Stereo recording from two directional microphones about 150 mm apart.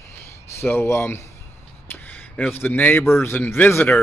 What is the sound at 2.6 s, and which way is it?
A man's voice, 15° left (ahead or behind).